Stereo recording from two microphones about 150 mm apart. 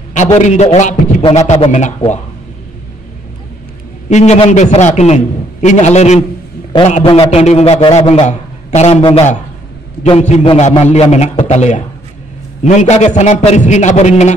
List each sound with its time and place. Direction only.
0.1 s a man's voice: 55° left (ahead or behind)
4.1 s a man's voice: 50° left (ahead or behind)
7.2 s a man's voice: 45° left (ahead or behind)
10.0 s a man's voice: 45° left (ahead or behind)